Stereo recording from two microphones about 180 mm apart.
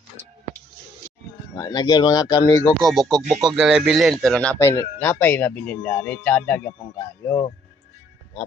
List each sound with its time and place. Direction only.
1.5 s speech: 20° left (ahead or behind)
2.8 s speech: centre (ahead or behind)